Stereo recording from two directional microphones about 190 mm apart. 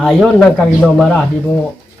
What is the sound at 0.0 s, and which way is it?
Speech, centre (ahead or behind).